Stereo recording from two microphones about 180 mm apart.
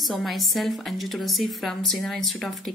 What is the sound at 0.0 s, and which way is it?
A woman's voice, centre (ahead or behind).